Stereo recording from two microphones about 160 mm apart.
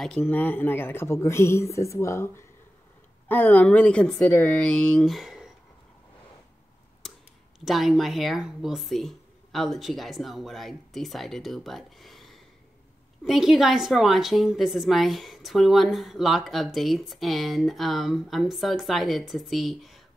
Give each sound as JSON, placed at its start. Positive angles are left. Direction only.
{"t": 0.0, "sound": "a woman's voice", "side_deg": 5}
{"t": 7.6, "sound": "a woman's voice", "side_deg": 0}